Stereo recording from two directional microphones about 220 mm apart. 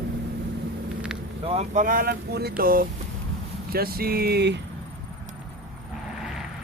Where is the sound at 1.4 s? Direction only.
30° right (ahead or behind); by 4.6 s 50° right (ahead or behind).